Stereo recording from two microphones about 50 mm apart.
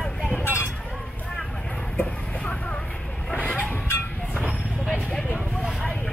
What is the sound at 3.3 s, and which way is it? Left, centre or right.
Vehicle, left.